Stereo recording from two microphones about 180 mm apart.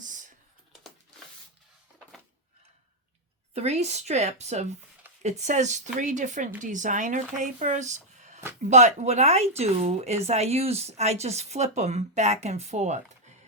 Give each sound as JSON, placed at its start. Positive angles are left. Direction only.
{"t": 3.5, "sound": "speech", "side_deg": -35}